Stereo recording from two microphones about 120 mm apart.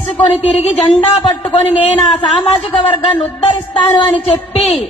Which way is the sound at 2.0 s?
40° left (ahead or behind).